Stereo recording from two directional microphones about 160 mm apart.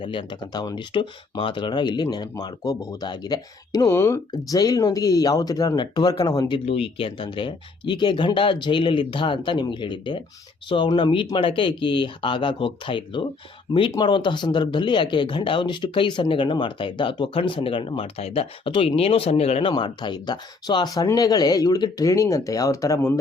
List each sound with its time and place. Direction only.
0.0 s speech: 30° left (ahead or behind)
6.7 s speech: 35° left (ahead or behind); by 23.1 s 20° left (ahead or behind)